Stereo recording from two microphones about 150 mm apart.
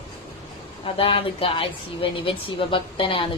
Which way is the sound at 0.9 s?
35° left (ahead or behind).